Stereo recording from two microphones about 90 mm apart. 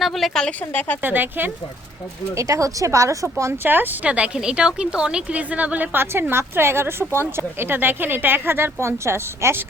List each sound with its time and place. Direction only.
0.0 s a woman's voice: centre (ahead or behind)
0.6 s speech: 20° left (ahead or behind)
1.0 s a woman's voice: 20° right (ahead or behind)
2.3 s speech: 35° right (ahead or behind)
3.6 s a woman's voice: 20° right (ahead or behind)